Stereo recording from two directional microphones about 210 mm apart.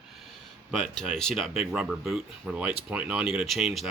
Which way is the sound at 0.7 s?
Centre (ahead or behind).